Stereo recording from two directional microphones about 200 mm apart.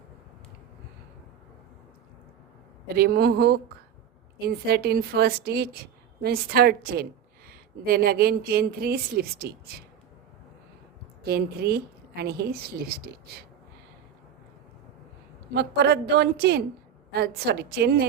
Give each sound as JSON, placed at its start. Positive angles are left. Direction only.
{"t": 2.8, "sound": "a woman's voice", "side_deg": -50}
{"t": 11.3, "sound": "a woman's voice", "side_deg": -50}
{"t": 15.5, "sound": "a woman's voice", "side_deg": -55}